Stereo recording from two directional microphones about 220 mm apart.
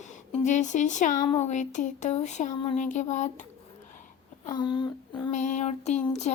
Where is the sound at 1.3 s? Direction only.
30° left (ahead or behind).